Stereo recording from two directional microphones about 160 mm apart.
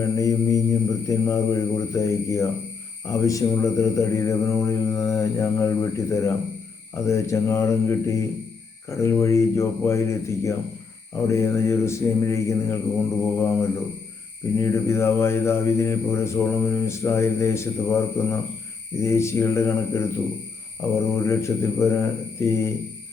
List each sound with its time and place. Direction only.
0.0 s mantra: 20° left (ahead or behind)